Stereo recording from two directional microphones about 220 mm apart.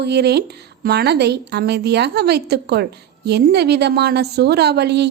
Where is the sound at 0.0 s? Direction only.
50° right (ahead or behind).